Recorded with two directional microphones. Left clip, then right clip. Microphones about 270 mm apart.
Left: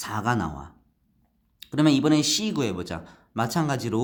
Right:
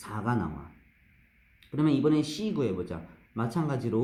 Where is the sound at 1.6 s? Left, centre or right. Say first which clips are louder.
Left 5 dB; left.